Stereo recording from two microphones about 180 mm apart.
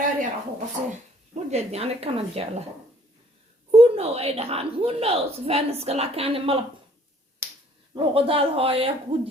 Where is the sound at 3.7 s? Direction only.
35° right (ahead or behind).